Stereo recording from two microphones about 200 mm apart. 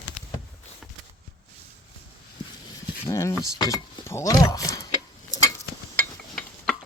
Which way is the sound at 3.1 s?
15° left (ahead or behind).